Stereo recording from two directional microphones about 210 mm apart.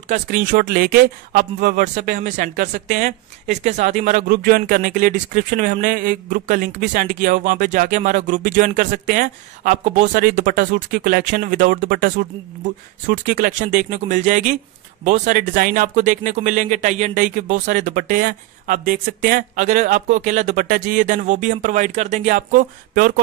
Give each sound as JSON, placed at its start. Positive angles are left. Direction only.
{"t": 0.1, "sound": "speech", "side_deg": -40}